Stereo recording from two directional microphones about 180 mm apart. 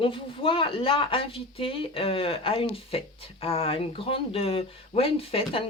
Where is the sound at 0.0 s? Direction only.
30° left (ahead or behind).